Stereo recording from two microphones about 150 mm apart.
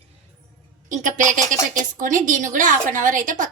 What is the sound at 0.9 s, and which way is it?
A woman's voice, 60° right (ahead or behind).